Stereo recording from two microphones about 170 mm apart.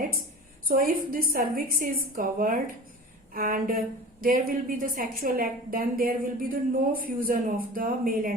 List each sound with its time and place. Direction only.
0.7 s a woman's voice: 55° right (ahead or behind)